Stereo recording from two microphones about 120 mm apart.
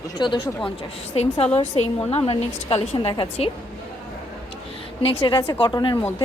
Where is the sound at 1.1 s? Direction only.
55° left (ahead or behind).